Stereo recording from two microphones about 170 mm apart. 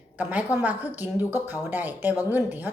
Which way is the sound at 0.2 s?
10° right (ahead or behind).